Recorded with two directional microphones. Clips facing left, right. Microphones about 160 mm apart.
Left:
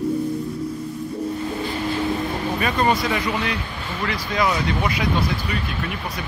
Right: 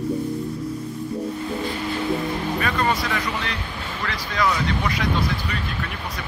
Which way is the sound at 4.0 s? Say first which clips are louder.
Left 2 dB; 15° left (ahead or behind).